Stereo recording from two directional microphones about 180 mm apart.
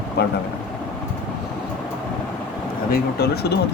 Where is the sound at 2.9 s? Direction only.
60° left (ahead or behind).